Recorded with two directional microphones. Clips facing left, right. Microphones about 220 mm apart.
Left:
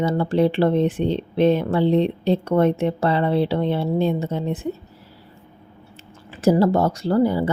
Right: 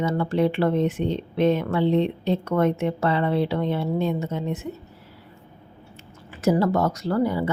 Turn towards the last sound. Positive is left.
turn(degrees=30)  # may be behind; listen again after turning